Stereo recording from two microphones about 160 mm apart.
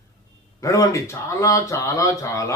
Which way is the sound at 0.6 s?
20° left (ahead or behind).